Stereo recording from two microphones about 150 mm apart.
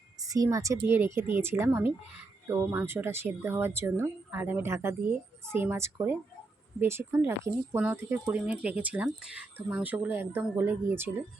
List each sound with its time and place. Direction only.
0.2 s speech: 25° right (ahead or behind)